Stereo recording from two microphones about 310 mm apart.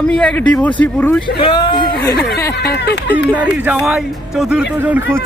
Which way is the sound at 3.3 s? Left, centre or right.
Centre.